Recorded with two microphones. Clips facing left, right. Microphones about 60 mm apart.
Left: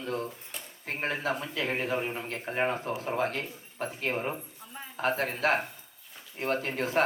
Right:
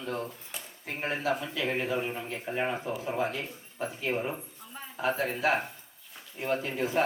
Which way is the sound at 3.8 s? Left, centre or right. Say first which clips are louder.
Even; left.